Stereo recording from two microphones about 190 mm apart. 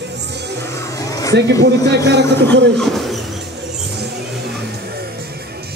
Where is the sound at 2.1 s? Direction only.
65° right (ahead or behind).